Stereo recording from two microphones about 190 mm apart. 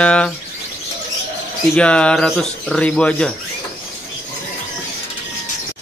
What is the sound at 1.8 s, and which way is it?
Speech, 5° left (ahead or behind).